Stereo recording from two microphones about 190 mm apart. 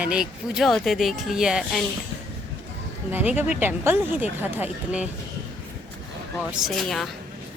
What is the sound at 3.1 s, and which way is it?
Speech, 10° right (ahead or behind).